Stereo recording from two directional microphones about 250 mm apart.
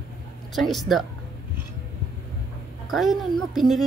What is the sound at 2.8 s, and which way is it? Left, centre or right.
Speech, centre.